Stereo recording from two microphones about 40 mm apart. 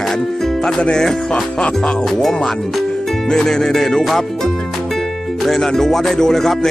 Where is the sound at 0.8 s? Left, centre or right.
Left.